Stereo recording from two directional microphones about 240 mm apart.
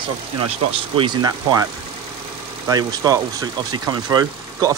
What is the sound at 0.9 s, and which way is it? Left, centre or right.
Speech, centre.